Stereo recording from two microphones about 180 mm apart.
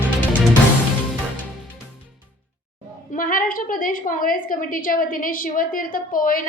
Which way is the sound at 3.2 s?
50° left (ahead or behind).